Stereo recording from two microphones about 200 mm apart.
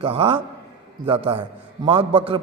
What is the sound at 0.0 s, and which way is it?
A man's voice, 25° right (ahead or behind).